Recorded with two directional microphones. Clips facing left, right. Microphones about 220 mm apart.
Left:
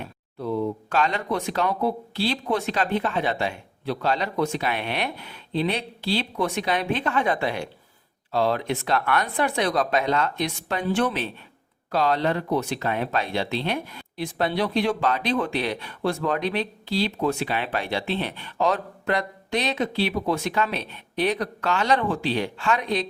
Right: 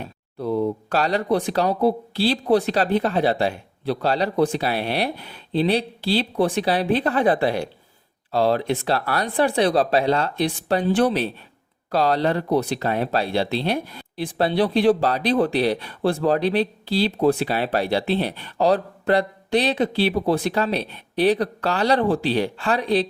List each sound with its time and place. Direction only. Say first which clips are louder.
0.0 s speech: right 3 dB; 35° right (ahead or behind)